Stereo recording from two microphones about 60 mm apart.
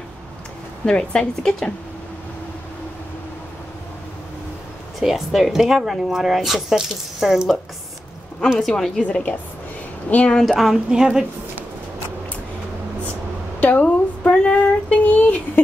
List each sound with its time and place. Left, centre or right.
0.8 s a woman's voice: centre
5.0 s speech: centre
8.5 s a woman's voice: centre
9.0 s a woman's voice: left
10.4 s speech: centre
10.9 s a woman's voice: centre
13.6 s a sound: left
15.0 s speech: left